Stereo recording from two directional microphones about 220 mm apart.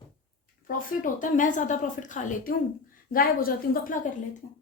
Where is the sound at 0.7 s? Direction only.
35° left (ahead or behind).